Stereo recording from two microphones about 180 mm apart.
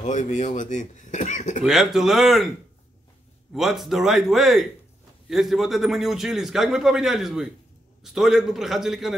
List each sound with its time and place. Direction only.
0.0 s speech: 40° left (ahead or behind)
1.6 s a man's voice: centre (ahead or behind)
3.5 s a man's voice: centre (ahead or behind)